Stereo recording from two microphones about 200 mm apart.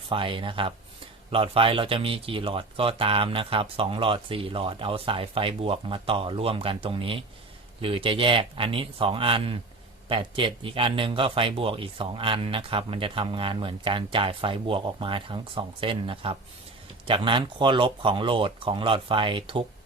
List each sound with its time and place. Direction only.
0.1 s speech: 25° right (ahead or behind)